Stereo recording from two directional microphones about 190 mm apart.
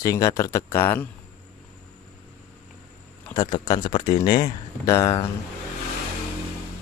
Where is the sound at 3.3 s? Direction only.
20° left (ahead or behind).